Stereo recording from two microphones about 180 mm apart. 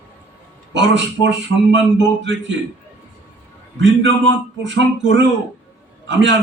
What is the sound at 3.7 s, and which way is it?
A man's voice, 90° right.